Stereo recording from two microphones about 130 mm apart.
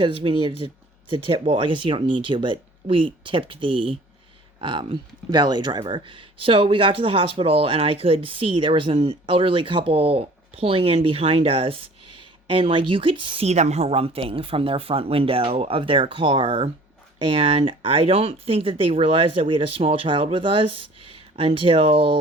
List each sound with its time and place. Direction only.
0.2 s speech: 40° right (ahead or behind)
13.4 s speech: 60° right (ahead or behind)